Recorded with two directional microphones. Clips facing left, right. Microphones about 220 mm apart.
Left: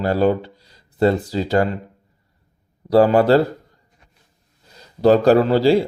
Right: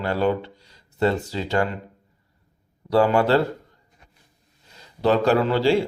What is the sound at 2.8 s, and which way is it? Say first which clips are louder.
Speech: left 5 dB; 35° left (ahead or behind).